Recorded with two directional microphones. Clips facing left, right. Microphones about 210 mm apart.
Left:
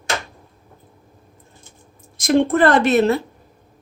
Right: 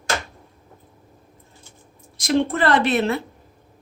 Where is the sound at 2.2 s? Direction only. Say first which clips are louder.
Left 5 dB; 50° left (ahead or behind).